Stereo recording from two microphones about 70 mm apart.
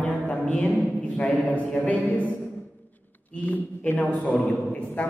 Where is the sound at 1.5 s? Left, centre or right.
Left.